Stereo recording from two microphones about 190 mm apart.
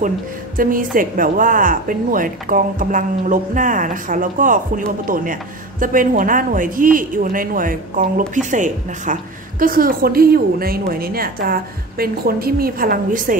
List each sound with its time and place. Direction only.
0.6 s a woman's voice: 45° right (ahead or behind)